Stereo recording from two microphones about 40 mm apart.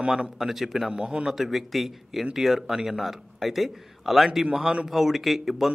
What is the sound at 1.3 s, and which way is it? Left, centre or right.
A man's voice, centre.